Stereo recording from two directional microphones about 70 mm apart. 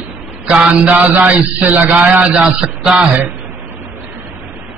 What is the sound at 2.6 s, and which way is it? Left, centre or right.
Mantra, centre.